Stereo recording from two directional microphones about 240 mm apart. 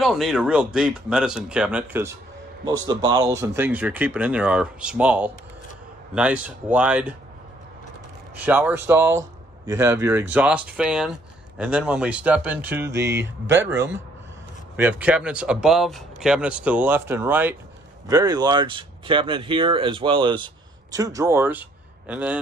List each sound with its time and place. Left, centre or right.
0.0 s speech: centre
8.5 s speech: centre